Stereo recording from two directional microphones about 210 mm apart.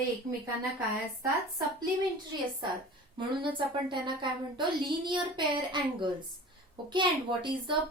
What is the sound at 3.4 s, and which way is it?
A woman's voice, 25° right (ahead or behind).